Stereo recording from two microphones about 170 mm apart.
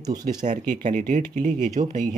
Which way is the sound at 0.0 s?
20° right (ahead or behind).